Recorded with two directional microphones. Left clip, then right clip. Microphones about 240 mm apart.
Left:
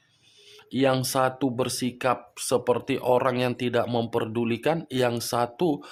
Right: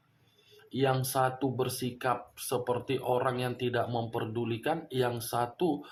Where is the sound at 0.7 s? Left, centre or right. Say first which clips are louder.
Left 6 dB; left.